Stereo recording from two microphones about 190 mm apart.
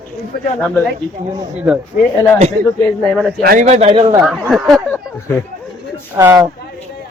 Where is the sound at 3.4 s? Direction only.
50° right (ahead or behind).